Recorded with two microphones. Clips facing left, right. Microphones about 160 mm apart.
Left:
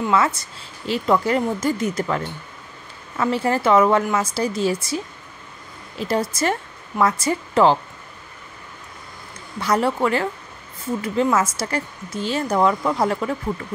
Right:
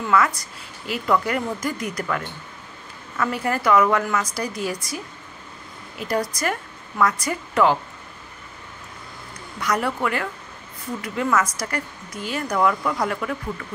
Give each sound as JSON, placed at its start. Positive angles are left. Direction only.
{"t": 0.0, "sound": "a woman's voice", "side_deg": 25}
{"t": 5.9, "sound": "speech", "side_deg": 25}
{"t": 9.6, "sound": "a woman's voice", "side_deg": 30}